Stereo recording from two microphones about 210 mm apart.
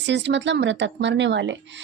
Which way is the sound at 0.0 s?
55° right (ahead or behind).